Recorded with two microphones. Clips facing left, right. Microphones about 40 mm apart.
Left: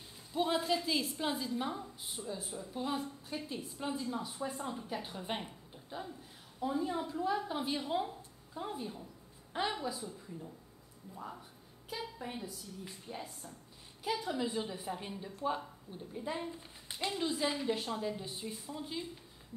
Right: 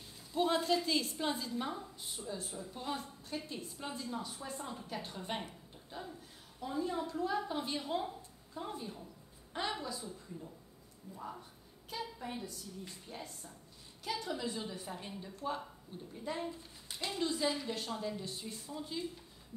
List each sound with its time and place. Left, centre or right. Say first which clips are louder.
0.3 s a woman's voice: right 1 dB; centre
11.1 s a woman's voice: even; centre